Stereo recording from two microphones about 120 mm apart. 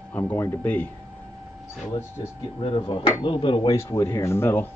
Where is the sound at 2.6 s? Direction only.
45° left (ahead or behind).